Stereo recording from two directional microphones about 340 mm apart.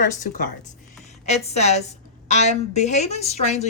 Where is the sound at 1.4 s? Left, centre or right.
Centre.